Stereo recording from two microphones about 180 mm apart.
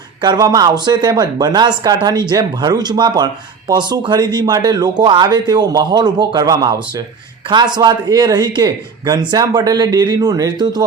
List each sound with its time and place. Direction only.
0.2 s speech: 25° right (ahead or behind)